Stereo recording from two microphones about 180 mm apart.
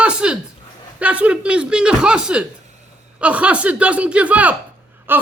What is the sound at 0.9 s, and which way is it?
Speech, 5° right (ahead or behind).